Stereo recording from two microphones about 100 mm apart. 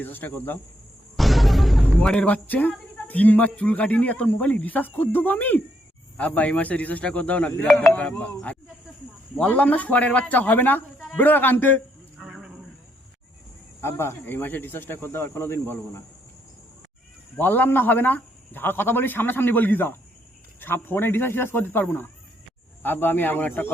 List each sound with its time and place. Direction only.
0.0 s speech: 20° left (ahead or behind)
1.1 s a man's voice: centre (ahead or behind); by 11.8 s 20° left (ahead or behind)
12.2 s a sound: 5° right (ahead or behind)
13.8 s speech: 25° left (ahead or behind)
17.3 s speech: 20° left (ahead or behind)